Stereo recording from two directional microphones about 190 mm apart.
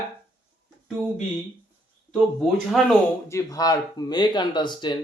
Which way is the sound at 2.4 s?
Centre (ahead or behind).